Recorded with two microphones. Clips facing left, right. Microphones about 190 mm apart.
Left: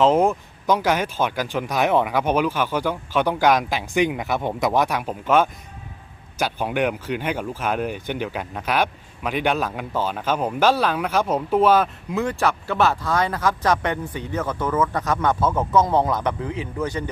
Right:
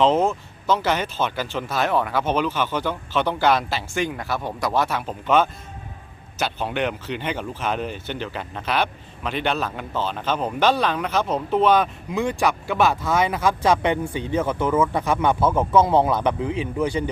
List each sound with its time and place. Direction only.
0.0 s speech: 10° left (ahead or behind)
12.3 s speech: 15° right (ahead or behind)